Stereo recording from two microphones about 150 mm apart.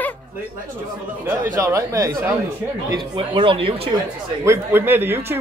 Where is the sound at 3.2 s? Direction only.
35° right (ahead or behind).